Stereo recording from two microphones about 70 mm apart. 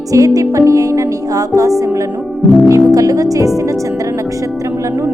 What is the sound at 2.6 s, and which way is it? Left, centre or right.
Speech, right.